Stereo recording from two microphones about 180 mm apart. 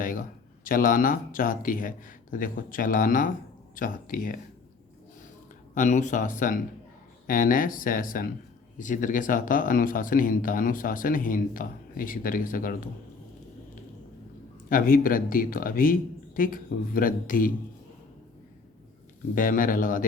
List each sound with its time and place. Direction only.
0.0 s speech: 50° left (ahead or behind)
5.7 s speech: 45° left (ahead or behind)
14.7 s speech: 50° left (ahead or behind)
19.3 s speech: 50° left (ahead or behind)